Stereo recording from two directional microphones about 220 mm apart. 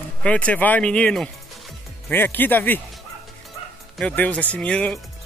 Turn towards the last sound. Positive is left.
turn(degrees=5)  # may be behind; listen again after turning